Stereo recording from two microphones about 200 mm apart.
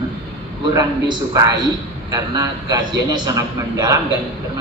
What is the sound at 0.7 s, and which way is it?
A man's voice, 20° right (ahead or behind).